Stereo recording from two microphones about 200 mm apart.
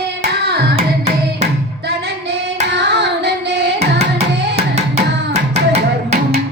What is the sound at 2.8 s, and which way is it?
Hands, 60° right (ahead or behind).